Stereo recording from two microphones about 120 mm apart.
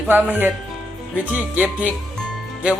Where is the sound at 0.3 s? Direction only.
15° right (ahead or behind).